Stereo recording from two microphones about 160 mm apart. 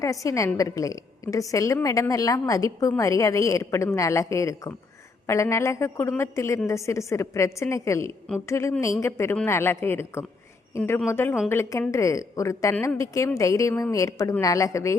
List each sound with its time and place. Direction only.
0.0 s a woman's voice: 20° left (ahead or behind)